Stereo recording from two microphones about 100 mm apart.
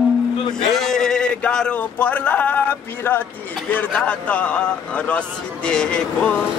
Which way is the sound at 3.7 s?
15° left (ahead or behind).